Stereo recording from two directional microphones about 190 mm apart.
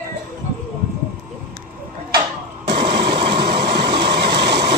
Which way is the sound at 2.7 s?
60° right (ahead or behind).